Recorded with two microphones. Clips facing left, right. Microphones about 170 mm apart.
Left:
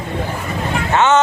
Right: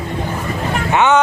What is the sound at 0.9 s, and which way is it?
Speech, 15° right (ahead or behind).